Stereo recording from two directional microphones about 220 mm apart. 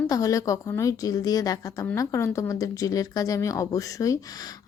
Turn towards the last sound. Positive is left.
turn(degrees=15)  # may be behind; listen again after turning